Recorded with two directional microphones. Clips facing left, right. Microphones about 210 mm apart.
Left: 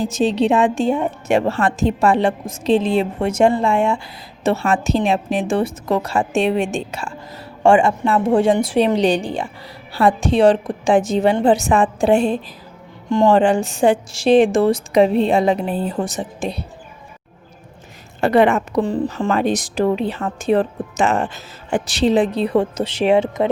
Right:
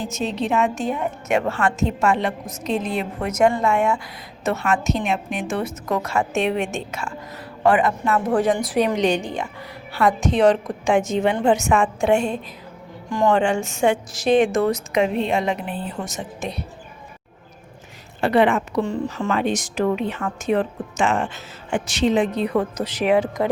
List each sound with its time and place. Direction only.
0.0 s a woman's voice: 30° left (ahead or behind)
18.2 s a woman's voice: 45° left (ahead or behind); by 23.5 s 25° left (ahead or behind)